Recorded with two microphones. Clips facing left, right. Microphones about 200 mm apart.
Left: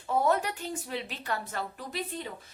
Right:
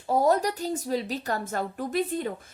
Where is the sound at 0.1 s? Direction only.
40° right (ahead or behind).